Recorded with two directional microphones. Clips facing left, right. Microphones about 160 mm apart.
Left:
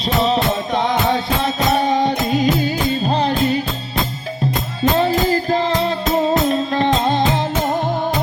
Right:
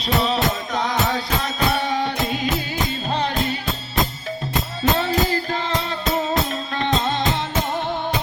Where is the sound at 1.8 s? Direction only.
40° left (ahead or behind).